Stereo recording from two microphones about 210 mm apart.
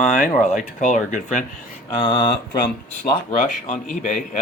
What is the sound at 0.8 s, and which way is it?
Speech, 35° left (ahead or behind).